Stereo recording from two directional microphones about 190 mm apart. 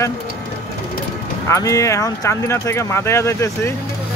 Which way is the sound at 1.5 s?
15° left (ahead or behind).